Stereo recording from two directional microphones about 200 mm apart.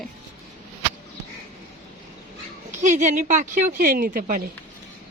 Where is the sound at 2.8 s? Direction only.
35° right (ahead or behind).